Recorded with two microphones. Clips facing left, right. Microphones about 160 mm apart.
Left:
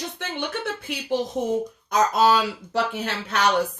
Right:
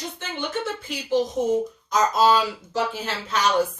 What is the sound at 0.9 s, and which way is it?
Speech, 60° left (ahead or behind).